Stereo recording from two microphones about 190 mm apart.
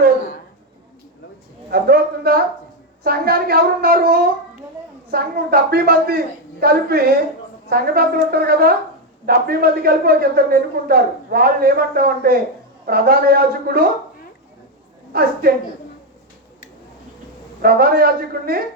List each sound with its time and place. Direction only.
1.7 s a man's voice: 55° right (ahead or behind)
15.1 s a man's voice: 50° right (ahead or behind)
17.6 s a man's voice: 50° right (ahead or behind)